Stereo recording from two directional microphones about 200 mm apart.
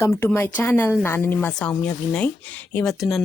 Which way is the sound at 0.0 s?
10° left (ahead or behind).